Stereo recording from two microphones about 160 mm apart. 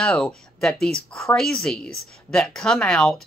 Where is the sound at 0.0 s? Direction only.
5° left (ahead or behind).